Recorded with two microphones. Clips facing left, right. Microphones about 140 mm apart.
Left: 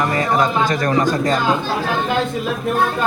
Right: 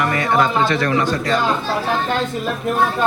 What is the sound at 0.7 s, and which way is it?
Speech, 45° left (ahead or behind).